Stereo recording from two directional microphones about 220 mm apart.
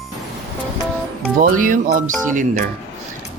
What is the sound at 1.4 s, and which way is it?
Speech, 35° right (ahead or behind).